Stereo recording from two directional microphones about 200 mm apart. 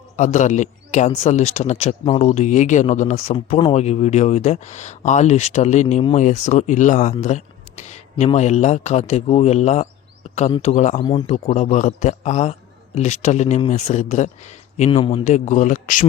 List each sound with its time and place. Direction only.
0.2 s a man's voice: 35° left (ahead or behind)